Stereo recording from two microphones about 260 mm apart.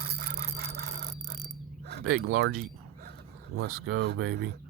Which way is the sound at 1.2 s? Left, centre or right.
Right.